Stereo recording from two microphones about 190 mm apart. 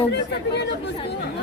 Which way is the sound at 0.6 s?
60° left (ahead or behind).